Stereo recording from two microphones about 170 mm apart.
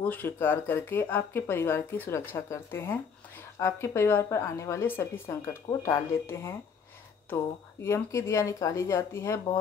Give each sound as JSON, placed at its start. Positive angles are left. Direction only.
{"t": 0.0, "sound": "speech", "side_deg": 10}
{"t": 7.8, "sound": "speech", "side_deg": 15}